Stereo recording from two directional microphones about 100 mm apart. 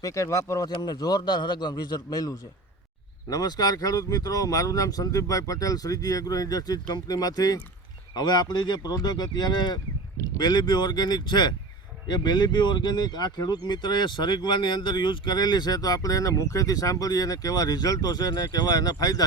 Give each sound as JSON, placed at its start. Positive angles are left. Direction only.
{"t": 0.0, "sound": "speech", "side_deg": 30}
{"t": 0.7, "sound": "speech", "side_deg": 45}